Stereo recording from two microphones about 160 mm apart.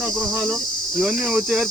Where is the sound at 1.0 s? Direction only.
5° right (ahead or behind).